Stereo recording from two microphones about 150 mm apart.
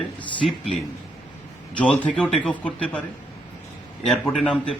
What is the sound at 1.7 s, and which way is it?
A man's voice, 5° left (ahead or behind).